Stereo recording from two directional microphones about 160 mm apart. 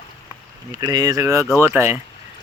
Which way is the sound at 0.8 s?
25° right (ahead or behind).